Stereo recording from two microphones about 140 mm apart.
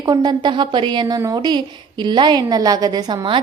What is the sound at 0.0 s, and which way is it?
A woman's voice, 30° right (ahead or behind).